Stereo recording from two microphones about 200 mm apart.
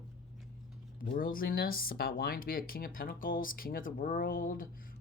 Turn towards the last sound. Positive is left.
turn(degrees=45)  # may be behind; listen again after turning